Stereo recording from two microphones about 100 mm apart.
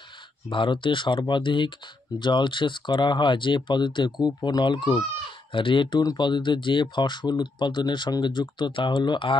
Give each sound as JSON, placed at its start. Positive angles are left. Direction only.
{"t": 0.5, "sound": "speech", "side_deg": 55}